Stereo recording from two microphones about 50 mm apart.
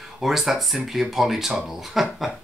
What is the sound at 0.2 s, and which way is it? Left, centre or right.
Speech, centre.